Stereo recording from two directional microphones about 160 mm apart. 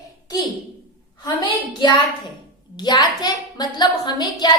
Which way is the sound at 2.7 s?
25° left (ahead or behind).